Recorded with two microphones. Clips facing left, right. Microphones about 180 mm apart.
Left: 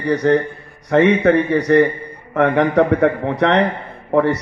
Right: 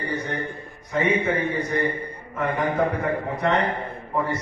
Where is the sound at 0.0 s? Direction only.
75° left (ahead or behind).